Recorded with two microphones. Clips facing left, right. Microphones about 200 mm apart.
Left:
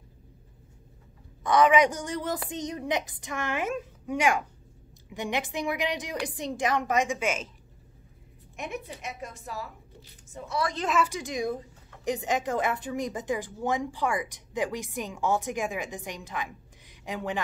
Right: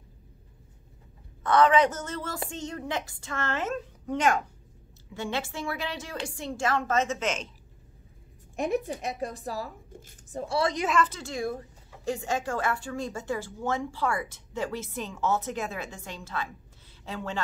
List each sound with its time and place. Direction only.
1.4 s a woman's voice: 10° left (ahead or behind)
8.5 s a woman's voice: 35° right (ahead or behind)
10.4 s a woman's voice: 30° right (ahead or behind)
10.9 s a woman's voice: 10° left (ahead or behind)